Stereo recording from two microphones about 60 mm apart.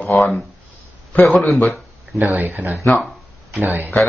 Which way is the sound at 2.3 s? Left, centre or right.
Right.